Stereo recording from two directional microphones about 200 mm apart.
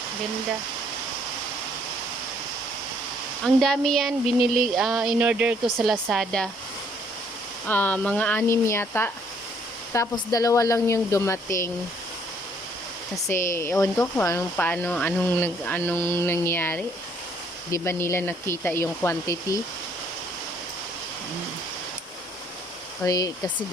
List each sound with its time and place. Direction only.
3.4 s speech: centre (ahead or behind)
7.7 s speech: 10° left (ahead or behind)
13.2 s speech: 15° left (ahead or behind)
23.0 s speech: 20° left (ahead or behind)